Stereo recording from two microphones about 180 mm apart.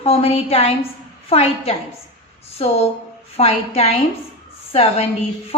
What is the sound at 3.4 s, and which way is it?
Speech, 35° left (ahead or behind).